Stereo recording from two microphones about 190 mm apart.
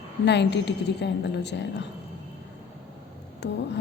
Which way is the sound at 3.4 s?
65° left (ahead or behind).